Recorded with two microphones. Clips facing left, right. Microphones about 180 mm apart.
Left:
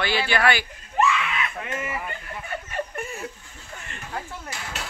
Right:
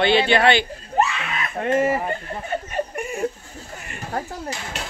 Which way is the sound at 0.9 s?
40° right (ahead or behind).